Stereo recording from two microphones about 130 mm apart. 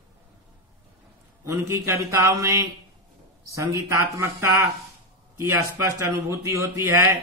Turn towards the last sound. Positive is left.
turn(degrees=-20)  # may be behind; listen again after turning